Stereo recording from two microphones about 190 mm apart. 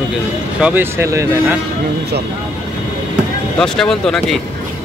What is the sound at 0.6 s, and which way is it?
Speech, 10° right (ahead or behind).